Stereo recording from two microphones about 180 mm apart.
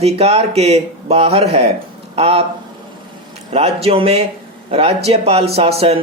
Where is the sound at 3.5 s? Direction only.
35° right (ahead or behind).